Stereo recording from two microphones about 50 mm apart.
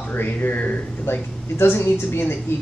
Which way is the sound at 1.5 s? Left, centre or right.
Left.